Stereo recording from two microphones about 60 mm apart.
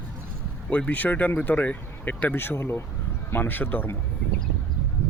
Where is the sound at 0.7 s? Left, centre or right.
Left.